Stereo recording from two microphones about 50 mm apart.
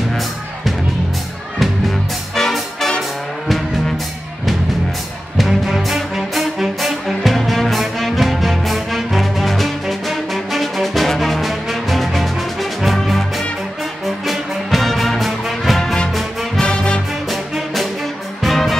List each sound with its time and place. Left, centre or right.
2.3 s music: centre
5.4 s music: centre
15.8 s music: centre
18.4 s music: centre